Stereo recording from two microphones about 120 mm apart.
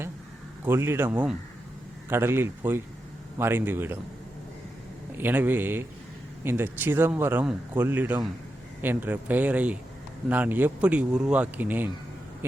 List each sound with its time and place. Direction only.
0.6 s speech: 20° right (ahead or behind)
5.1 s speech: 15° right (ahead or behind)